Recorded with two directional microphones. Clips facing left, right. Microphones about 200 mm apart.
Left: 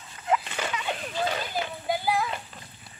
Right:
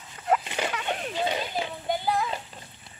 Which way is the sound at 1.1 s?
20° right (ahead or behind).